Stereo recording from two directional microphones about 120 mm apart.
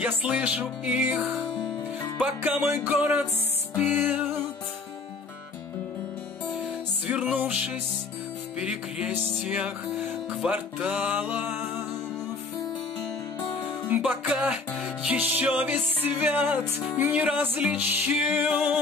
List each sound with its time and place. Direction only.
0.0 s music: 10° right (ahead or behind)
2.1 s music: 15° right (ahead or behind)
7.1 s music: 10° right (ahead or behind)
13.8 s music: 15° right (ahead or behind)